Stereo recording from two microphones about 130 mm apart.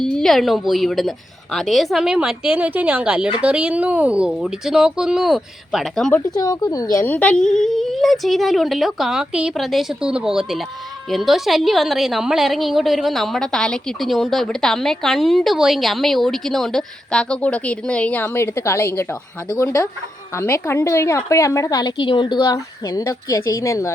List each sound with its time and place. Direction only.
0.0 s a woman's voice: 5° left (ahead or behind)
6.3 s a woman's voice: 30° left (ahead or behind)
7.0 s a woman's voice: 10° left (ahead or behind)